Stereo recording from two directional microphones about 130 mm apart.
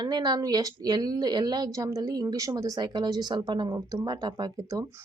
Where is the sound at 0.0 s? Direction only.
30° right (ahead or behind).